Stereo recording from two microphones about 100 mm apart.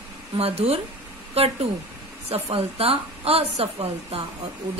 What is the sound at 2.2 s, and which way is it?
A woman's voice, 75° right (ahead or behind).